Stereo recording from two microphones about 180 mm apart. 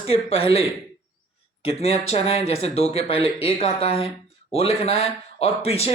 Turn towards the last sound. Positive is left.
turn(degrees=35)  # may be behind; listen again after turning